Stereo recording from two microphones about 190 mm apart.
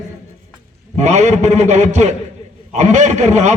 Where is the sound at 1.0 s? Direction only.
40° right (ahead or behind).